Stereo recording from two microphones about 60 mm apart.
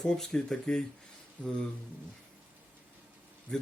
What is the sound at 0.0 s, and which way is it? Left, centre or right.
Speech, centre.